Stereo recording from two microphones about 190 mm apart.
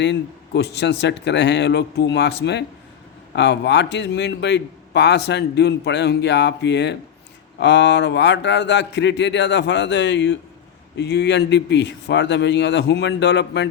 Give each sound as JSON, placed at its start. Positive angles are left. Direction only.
{"t": 0.0, "sound": "a man's voice", "side_deg": 65}